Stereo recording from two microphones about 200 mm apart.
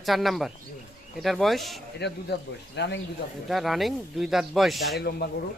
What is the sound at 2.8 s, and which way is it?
Speech, 60° left (ahead or behind).